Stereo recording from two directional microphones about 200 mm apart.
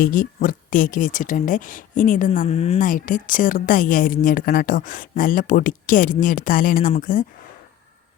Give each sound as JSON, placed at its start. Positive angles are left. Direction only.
{"t": 0.0, "sound": "speech", "side_deg": 45}
{"t": 2.8, "sound": "a woman's voice", "side_deg": 40}